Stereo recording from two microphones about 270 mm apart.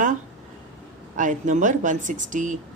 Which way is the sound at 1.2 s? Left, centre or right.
Right.